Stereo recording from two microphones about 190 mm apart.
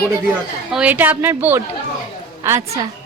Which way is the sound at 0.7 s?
10° right (ahead or behind).